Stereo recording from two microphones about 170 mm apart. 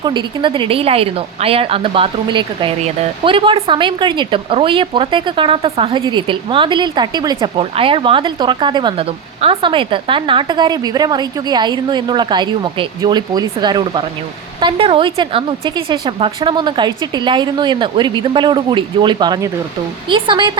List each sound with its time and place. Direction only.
0.0 s a woman's voice: 25° right (ahead or behind)